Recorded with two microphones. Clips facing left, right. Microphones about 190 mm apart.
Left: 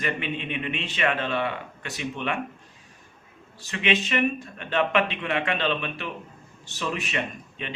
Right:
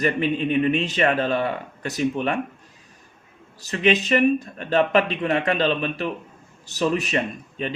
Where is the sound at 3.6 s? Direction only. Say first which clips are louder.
Right 6 dB; 40° right (ahead or behind).